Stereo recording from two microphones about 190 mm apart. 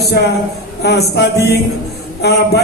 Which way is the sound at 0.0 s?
60° left (ahead or behind).